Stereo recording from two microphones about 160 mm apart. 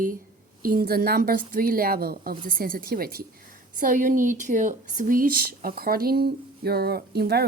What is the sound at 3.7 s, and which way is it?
Speech, 55° right (ahead or behind).